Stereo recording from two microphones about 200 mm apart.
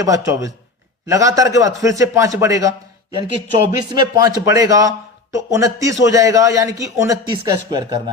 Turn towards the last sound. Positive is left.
turn(degrees=-20)  # may be behind; listen again after turning